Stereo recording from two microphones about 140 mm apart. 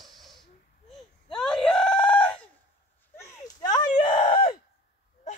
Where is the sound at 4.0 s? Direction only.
35° left (ahead or behind).